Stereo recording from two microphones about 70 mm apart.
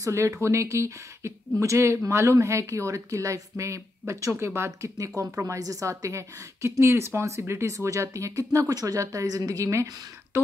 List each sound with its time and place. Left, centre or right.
0.0 s a woman's voice: right
8.5 s a woman's voice: right